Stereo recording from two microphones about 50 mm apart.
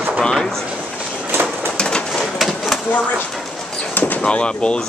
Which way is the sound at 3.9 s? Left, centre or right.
Left.